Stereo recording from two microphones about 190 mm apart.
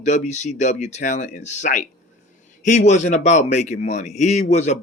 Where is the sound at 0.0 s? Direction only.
40° left (ahead or behind).